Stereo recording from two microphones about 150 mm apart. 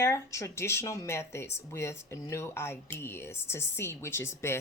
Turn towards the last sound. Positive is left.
turn(degrees=15)  # may be behind; listen again after turning